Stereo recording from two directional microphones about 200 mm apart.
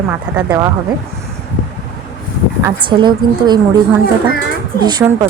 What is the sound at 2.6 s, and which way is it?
Speech, 25° right (ahead or behind).